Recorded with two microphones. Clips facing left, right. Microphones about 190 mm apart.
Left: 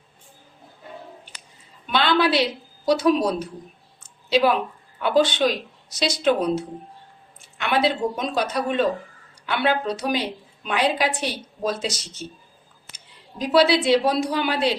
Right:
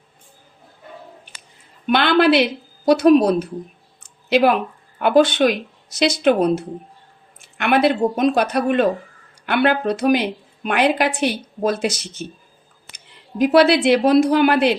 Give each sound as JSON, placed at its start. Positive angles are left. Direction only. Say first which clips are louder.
{"t": 1.9, "sound": "a woman's voice", "louder": "right 5 dB", "side_deg": -55}
{"t": 13.4, "sound": "a woman's voice", "louder": "right 5 dB", "side_deg": -55}